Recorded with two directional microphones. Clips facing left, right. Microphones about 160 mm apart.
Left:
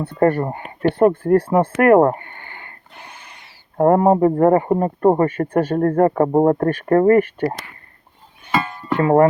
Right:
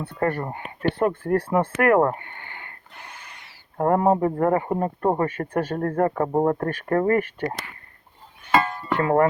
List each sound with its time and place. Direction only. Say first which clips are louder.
0.2 s speech: left 8 dB; 45° left (ahead or behind)
0.4 s speech: left 6 dB; 35° left (ahead or behind)
2.2 s a sound: left 2 dB; 40° left (ahead or behind)
3.0 s a sound: left 2 dB; 20° left (ahead or behind)
3.8 s speech: left 6 dB; 35° left (ahead or behind)
5.3 s speech: left 7 dB; 55° left (ahead or behind)
6.9 s speech: left 7 dB; 55° left (ahead or behind)
9.0 s speech: left 6 dB; 25° left (ahead or behind)